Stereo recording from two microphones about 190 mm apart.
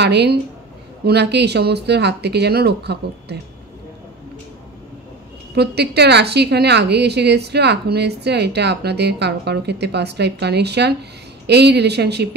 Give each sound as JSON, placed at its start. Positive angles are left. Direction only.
{"t": 0.0, "sound": "a woman's voice", "side_deg": -60}
{"t": 5.5, "sound": "a woman's voice", "side_deg": -60}